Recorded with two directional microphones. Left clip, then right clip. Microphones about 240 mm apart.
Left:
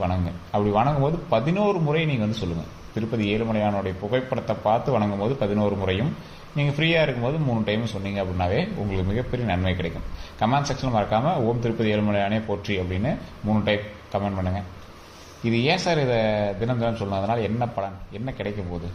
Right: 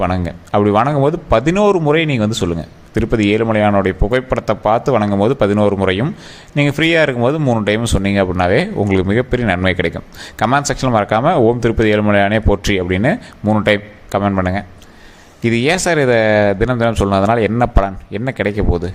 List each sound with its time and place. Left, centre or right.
0.0 s speech: right